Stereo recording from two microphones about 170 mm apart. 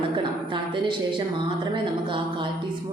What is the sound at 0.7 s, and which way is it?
Speech, 30° right (ahead or behind).